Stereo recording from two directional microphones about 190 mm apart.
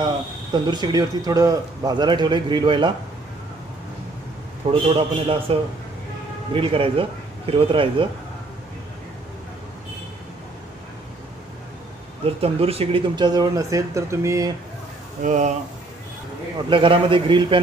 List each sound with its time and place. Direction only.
0.5 s speech: 20° right (ahead or behind)
4.6 s a man's voice: 30° right (ahead or behind)
12.4 s speech: 30° right (ahead or behind); by 14.5 s 15° right (ahead or behind)
15.2 s a man's voice: 40° right (ahead or behind)
16.6 s speech: 25° right (ahead or behind)